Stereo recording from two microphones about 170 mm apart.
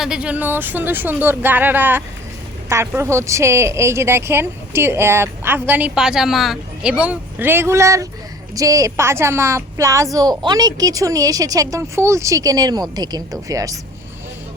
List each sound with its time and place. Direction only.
0.0 s a woman's voice: 5° right (ahead or behind)